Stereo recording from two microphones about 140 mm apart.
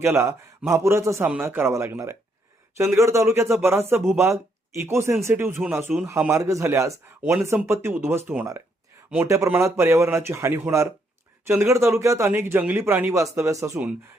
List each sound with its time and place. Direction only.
0.0 s a man's voice: 15° right (ahead or behind)
9.2 s a man's voice: 20° right (ahead or behind)